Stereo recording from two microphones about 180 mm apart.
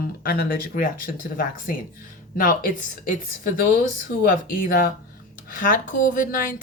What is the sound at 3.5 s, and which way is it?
Speech, 50° left (ahead or behind).